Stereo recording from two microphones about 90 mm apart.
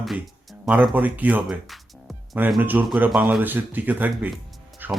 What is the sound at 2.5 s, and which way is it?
Speech, 20° right (ahead or behind).